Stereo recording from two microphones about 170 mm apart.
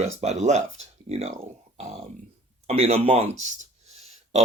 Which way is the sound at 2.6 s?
35° right (ahead or behind).